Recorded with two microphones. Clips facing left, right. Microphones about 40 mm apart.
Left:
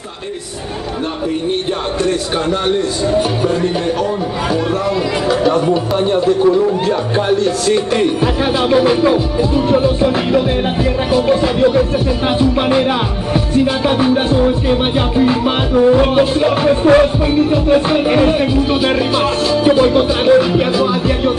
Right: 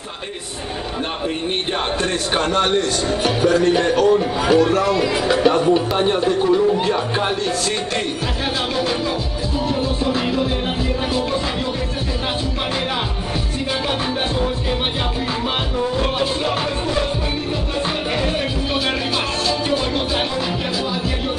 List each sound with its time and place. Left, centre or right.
5.3 s speech: right
5.7 s a man's voice: centre
8.2 s music: centre
11.2 s music: left
13.8 s music: centre
15.7 s music: left
16.8 s music: left
17.5 s music: left